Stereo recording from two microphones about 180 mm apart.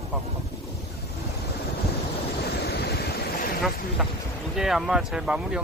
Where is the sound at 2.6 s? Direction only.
60° left (ahead or behind).